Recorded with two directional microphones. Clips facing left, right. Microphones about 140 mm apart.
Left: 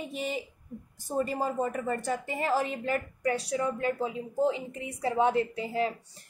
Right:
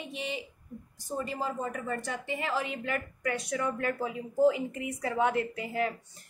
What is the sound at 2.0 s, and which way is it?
A woman's voice, 40° left (ahead or behind).